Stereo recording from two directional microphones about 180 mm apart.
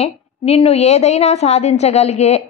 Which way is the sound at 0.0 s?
35° left (ahead or behind).